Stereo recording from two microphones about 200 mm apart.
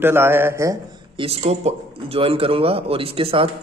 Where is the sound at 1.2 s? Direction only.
30° right (ahead or behind).